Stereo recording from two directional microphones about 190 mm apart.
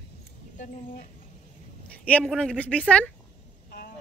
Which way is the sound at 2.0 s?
5° left (ahead or behind).